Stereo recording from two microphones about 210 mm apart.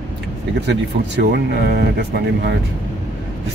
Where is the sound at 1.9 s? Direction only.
50° right (ahead or behind).